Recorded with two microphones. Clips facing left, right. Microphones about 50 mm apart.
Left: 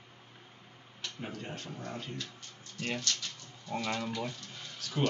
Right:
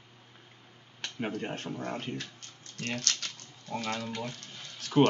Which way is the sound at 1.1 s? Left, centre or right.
Right.